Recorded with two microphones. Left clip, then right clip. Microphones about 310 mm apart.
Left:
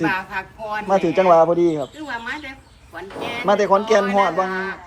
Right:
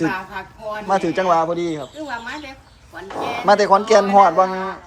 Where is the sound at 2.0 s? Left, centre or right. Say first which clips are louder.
Even; centre.